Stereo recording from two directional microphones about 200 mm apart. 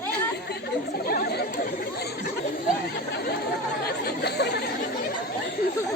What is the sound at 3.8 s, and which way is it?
Chatter, 55° left (ahead or behind).